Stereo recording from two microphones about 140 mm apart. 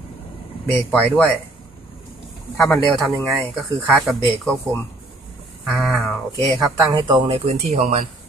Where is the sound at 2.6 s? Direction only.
10° left (ahead or behind).